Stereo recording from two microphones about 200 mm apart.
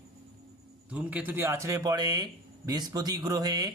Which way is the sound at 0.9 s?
5° right (ahead or behind).